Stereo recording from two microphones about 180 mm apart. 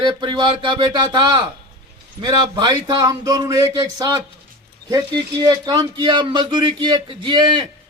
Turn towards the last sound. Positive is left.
turn(degrees=-25)  # may be behind; listen again after turning